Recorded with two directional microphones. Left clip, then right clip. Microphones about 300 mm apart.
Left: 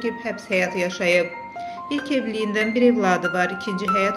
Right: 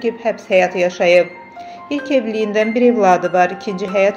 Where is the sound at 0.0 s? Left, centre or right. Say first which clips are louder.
Right 8 dB; centre.